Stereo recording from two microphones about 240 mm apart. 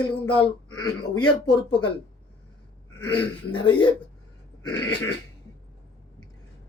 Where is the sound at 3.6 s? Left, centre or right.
Centre.